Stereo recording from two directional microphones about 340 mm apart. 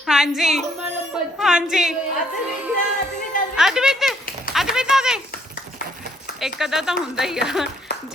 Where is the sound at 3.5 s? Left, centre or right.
Centre.